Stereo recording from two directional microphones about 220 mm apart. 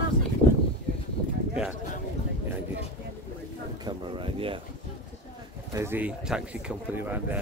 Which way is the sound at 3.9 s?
25° right (ahead or behind).